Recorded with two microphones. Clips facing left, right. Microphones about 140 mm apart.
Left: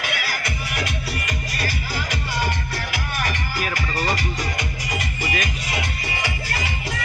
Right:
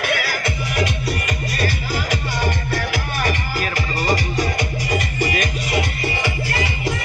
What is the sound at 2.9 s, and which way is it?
Music, 30° right (ahead or behind).